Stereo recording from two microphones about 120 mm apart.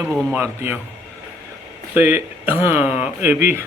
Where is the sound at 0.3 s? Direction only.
15° right (ahead or behind).